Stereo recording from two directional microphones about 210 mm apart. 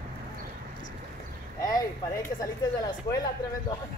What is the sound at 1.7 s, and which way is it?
Speech, 15° left (ahead or behind).